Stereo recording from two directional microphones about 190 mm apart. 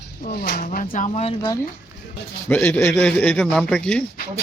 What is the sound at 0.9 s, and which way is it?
Speech, 35° left (ahead or behind).